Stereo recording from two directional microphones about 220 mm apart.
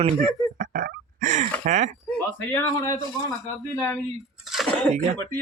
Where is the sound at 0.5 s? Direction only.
35° right (ahead or behind).